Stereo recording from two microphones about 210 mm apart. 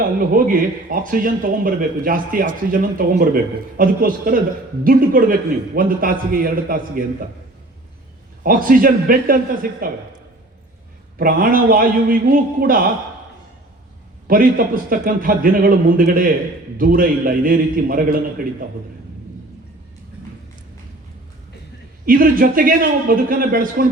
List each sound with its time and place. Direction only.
0.2 s a man's voice: 40° right (ahead or behind)
8.4 s a man's voice: 40° right (ahead or behind)
11.2 s a man's voice: 45° right (ahead or behind)
14.3 s a man's voice: 45° right (ahead or behind)
22.0 s a man's voice: 45° right (ahead or behind)